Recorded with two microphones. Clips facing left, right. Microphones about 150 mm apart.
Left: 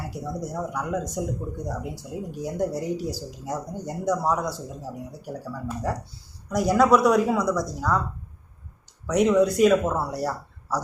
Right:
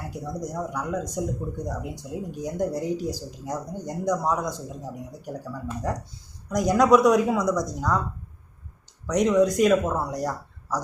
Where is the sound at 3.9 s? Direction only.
5° left (ahead or behind).